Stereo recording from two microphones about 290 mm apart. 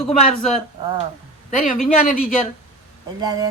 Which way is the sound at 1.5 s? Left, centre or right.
Left.